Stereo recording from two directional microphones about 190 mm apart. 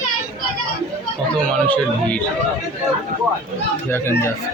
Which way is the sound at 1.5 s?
5° left (ahead or behind).